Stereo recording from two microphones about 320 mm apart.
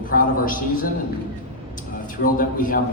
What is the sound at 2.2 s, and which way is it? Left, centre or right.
Speech, left.